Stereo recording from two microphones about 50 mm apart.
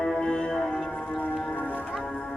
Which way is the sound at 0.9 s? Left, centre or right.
Left.